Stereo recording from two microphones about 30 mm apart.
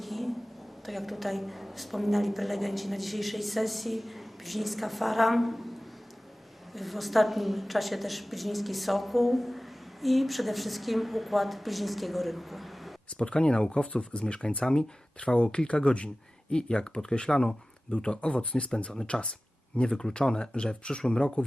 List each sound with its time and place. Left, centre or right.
0.0 s a sound: centre
0.9 s a woman's voice: centre
6.7 s a woman's voice: centre
13.1 s speech: left
19.9 s speech: left